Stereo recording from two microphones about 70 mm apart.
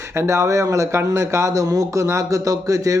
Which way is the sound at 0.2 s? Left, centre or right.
Right.